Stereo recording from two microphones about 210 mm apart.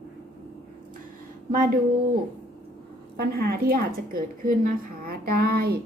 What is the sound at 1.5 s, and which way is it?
Speech, 40° right (ahead or behind).